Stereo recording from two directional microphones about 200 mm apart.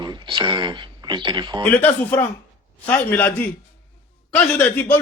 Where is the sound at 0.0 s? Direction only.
20° right (ahead or behind).